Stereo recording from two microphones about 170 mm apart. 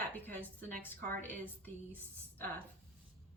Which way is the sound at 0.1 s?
10° left (ahead or behind).